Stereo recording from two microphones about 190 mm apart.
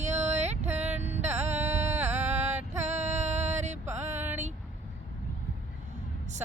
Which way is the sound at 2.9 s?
40° right (ahead or behind).